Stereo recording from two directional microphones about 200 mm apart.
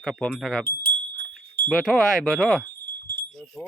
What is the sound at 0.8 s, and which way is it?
Wind chime, 55° right (ahead or behind).